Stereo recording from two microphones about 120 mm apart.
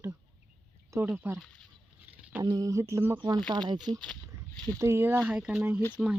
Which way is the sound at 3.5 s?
35° right (ahead or behind).